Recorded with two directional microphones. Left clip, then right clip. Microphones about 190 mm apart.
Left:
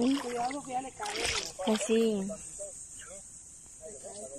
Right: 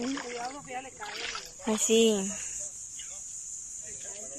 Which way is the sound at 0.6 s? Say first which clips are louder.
Left 3 dB; 25° left (ahead or behind).